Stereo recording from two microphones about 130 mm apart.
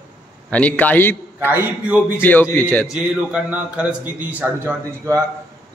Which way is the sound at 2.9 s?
10° right (ahead or behind).